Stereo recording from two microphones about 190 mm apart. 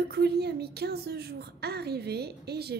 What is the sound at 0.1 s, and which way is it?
A woman's voice, 60° right (ahead or behind).